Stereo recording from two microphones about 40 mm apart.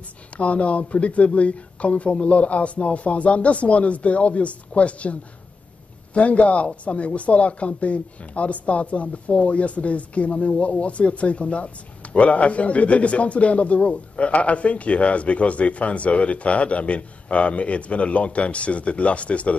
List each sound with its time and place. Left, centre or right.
0.4 s speech: left
6.1 s speech: left